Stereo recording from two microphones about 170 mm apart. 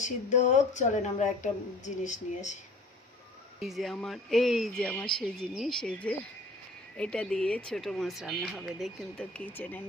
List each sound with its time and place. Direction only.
0.0 s speech: 45° left (ahead or behind)
3.6 s speech: centre (ahead or behind)